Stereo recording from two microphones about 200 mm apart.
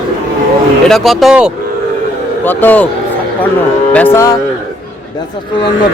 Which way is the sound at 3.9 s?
10° left (ahead or behind).